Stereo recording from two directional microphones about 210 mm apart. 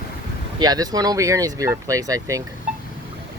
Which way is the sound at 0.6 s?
20° right (ahead or behind).